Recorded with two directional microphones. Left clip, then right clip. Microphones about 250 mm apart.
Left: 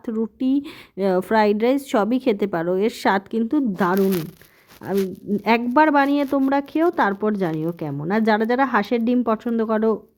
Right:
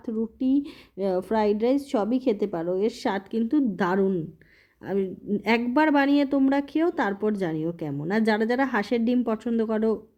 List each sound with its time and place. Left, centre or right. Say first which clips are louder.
0.0 s speech: left 4 dB; left